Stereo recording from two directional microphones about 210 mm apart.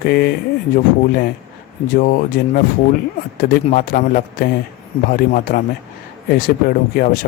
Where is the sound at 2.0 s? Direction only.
45° left (ahead or behind).